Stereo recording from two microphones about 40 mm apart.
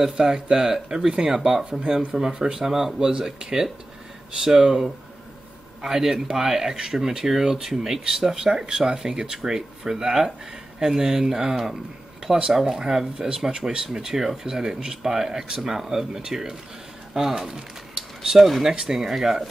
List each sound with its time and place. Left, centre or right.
0.0 s speech: centre